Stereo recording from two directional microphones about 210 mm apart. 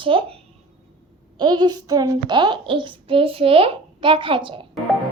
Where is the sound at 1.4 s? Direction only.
20° right (ahead or behind).